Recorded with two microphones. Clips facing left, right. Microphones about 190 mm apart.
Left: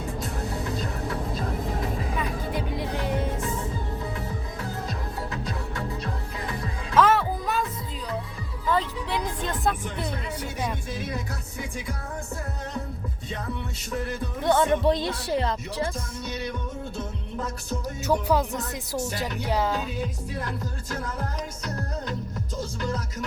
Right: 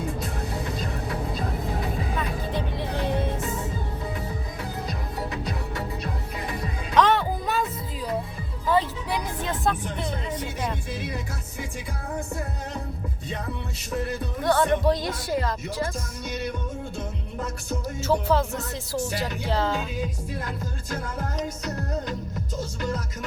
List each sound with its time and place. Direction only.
2.1 s music: 10° left (ahead or behind)
6.9 s music: 5° left (ahead or behind)
8.7 s music: 10° right (ahead or behind)
14.4 s speech: 20° left (ahead or behind)
18.0 s speech: 15° left (ahead or behind)